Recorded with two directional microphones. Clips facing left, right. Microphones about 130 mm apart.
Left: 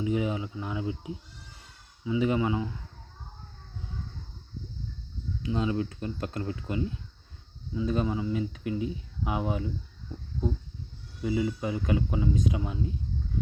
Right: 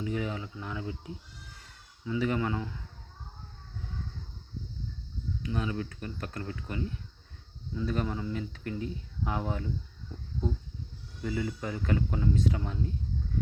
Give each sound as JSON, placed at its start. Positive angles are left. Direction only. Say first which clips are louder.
{"t": 0.0, "sound": "speech", "louder": "left 5 dB", "side_deg": 20}
{"t": 5.4, "sound": "speech", "louder": "left 5 dB", "side_deg": 25}
{"t": 11.2, "sound": "speech", "louder": "left 5 dB", "side_deg": 15}